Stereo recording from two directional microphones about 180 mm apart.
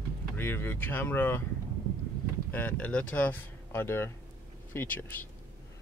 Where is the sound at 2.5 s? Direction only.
10° left (ahead or behind).